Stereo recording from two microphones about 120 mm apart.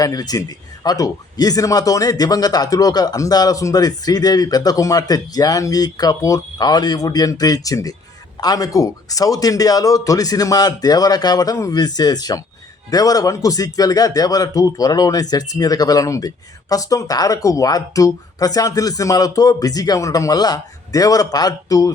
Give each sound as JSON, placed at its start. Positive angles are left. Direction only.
{"t": 0.0, "sound": "speech", "side_deg": 30}